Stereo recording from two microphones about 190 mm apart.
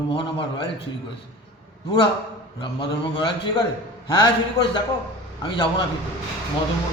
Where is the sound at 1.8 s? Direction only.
25° left (ahead or behind).